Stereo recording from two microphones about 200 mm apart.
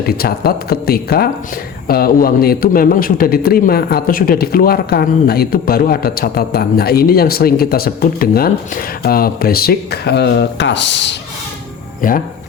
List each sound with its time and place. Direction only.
0.0 s a man's voice: 50° left (ahead or behind)
12.0 s a man's voice: 40° left (ahead or behind)